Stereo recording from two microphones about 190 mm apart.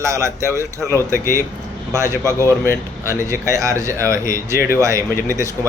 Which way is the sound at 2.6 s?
10° left (ahead or behind).